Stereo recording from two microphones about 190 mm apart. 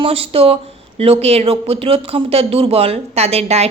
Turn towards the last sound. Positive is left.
turn(degrees=-35)  # may be behind; listen again after turning